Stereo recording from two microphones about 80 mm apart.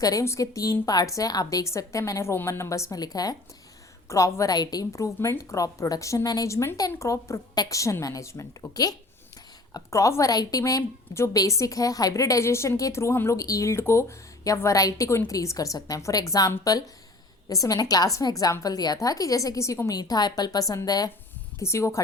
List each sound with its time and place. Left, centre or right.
0.0 s a woman's voice: left
2.3 s a woman's voice: left
3.0 s a woman's voice: left
4.1 s a woman's voice: left
4.5 s a woman's voice: left
8.7 s a woman's voice: left
9.9 s a woman's voice: left
20.0 s a woman's voice: left
21.6 s a woman's voice: left